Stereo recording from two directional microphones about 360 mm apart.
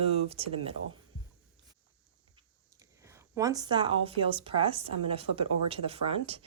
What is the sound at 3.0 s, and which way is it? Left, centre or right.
A woman's voice, centre.